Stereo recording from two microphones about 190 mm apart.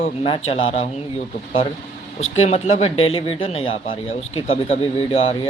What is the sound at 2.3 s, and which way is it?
Speech, 35° left (ahead or behind).